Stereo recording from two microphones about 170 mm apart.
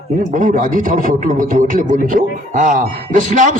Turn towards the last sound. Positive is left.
turn(degrees=-50)  # may be behind; listen again after turning